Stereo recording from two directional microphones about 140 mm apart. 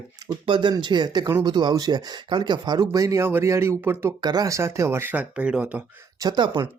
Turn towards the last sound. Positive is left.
turn(degrees=-35)  # may be behind; listen again after turning